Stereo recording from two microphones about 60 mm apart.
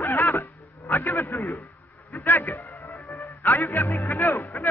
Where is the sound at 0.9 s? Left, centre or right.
Left.